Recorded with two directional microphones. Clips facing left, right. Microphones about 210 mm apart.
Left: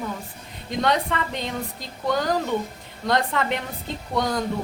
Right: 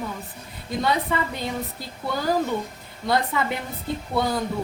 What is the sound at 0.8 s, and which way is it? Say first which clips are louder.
A woman's voice: left 1 dB; 5° right (ahead or behind).